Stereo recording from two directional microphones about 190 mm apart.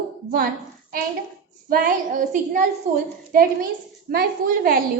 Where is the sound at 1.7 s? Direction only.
45° right (ahead or behind).